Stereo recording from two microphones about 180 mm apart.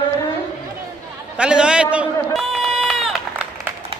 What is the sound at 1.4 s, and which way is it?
Speech, 5° right (ahead or behind).